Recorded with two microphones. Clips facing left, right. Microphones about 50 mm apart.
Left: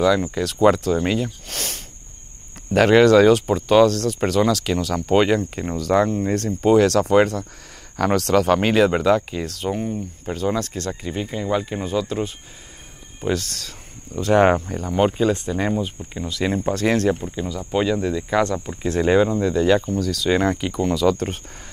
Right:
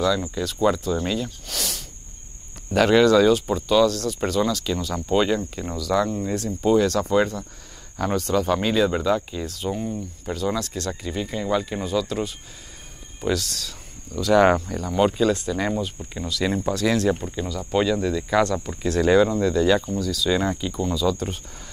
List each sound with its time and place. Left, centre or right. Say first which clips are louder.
0.0 s speech: left 4 dB; left
1.0 s speech: left 4 dB; left
5.8 s speech: left 4 dB; left
9.8 s speech: left 2 dB; left
17.1 s speech: left 1 dB; centre; by 21.4 s left